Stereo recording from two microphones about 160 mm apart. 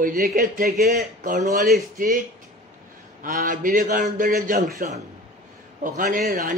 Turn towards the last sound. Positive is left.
turn(degrees=-60)  # may be behind; listen again after turning